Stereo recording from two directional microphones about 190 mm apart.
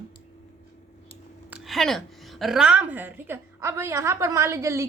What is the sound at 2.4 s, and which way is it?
A woman's voice, 5° right (ahead or behind).